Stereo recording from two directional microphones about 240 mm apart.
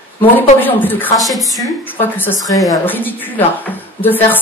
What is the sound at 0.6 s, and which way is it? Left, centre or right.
A woman's voice, centre.